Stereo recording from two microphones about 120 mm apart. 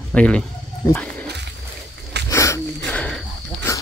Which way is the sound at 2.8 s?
10° left (ahead or behind).